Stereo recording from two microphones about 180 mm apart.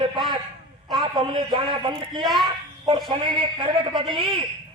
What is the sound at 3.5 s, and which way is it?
Speech, 30° right (ahead or behind).